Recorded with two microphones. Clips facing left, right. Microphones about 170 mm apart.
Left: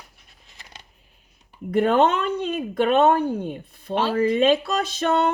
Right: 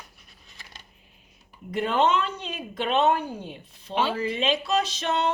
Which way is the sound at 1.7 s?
55° left (ahead or behind).